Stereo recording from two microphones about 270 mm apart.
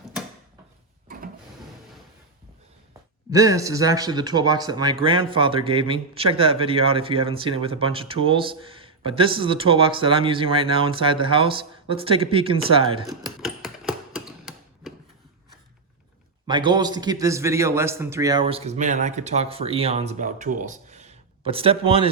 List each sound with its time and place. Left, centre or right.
1.0 s vehicle: right
3.2 s speech: centre
13.1 s typewriter: centre
16.5 s speech: centre